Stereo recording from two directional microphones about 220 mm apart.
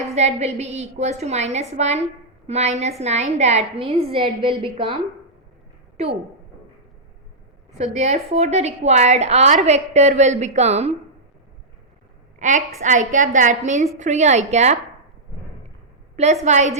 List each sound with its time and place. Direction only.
0.1 s a woman's voice: 30° right (ahead or behind)
6.0 s a woman's voice: 30° right (ahead or behind)
7.8 s a woman's voice: 30° right (ahead or behind)
12.4 s a woman's voice: 35° right (ahead or behind)
16.1 s a woman's voice: 30° right (ahead or behind)